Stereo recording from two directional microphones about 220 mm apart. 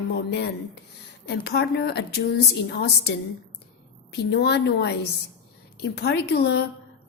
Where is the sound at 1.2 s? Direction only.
50° left (ahead or behind).